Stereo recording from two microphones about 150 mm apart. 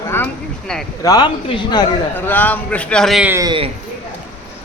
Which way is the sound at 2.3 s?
10° left (ahead or behind).